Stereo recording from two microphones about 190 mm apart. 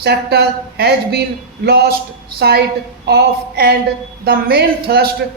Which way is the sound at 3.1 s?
55° right (ahead or behind).